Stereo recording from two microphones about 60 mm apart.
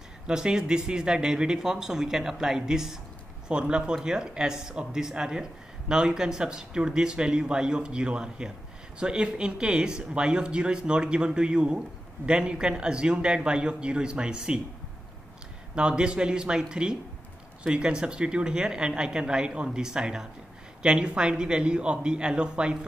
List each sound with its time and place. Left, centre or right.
0.3 s speech: centre
15.7 s speech: centre